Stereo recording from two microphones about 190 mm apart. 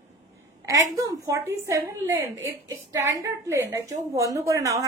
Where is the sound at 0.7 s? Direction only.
20° right (ahead or behind).